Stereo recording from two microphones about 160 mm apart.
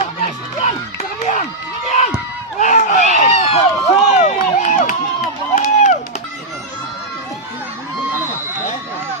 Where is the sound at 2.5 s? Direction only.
50° left (ahead or behind).